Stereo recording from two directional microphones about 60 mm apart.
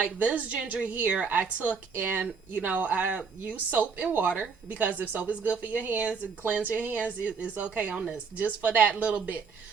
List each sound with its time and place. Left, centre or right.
0.0 s speech: right